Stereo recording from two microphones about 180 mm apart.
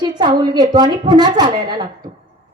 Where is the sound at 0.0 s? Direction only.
25° right (ahead or behind).